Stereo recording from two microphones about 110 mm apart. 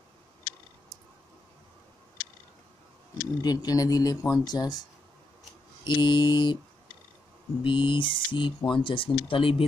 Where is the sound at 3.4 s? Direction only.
35° left (ahead or behind).